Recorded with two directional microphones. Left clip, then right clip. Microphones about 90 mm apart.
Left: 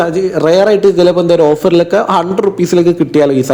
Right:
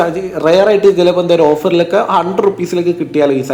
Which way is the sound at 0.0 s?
45° left (ahead or behind).